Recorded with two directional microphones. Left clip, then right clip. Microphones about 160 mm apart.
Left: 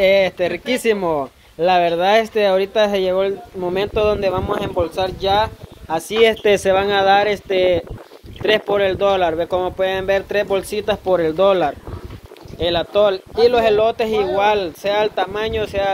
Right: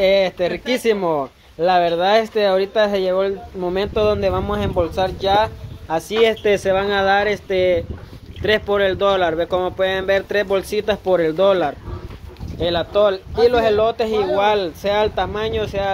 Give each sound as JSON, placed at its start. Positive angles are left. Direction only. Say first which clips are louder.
{"t": 0.0, "sound": "speech", "louder": "left 1 dB", "side_deg": 20}
{"t": 12.5, "sound": "speech", "louder": "left 1 dB", "side_deg": 20}